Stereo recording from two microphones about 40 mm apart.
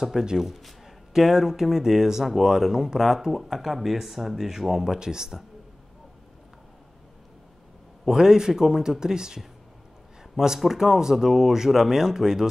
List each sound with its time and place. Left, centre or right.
0.0 s speech: centre
0.4 s a man's voice: centre
4.9 s speech: centre
8.1 s speech: centre
10.6 s speech: centre